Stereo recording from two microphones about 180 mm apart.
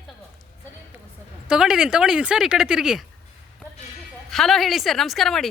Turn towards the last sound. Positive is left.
turn(degrees=0)  # may be behind; listen again after turning